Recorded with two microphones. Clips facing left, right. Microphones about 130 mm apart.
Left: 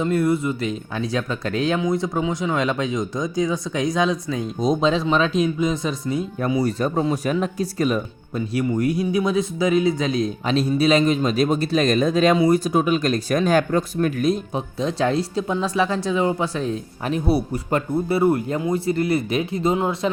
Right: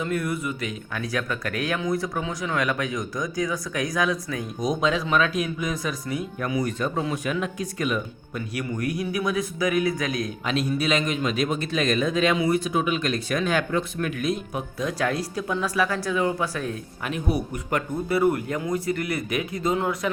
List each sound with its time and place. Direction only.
0.0 s speech: 30° left (ahead or behind)